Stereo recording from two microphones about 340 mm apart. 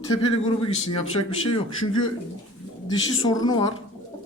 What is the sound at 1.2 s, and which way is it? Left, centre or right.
Speech, left.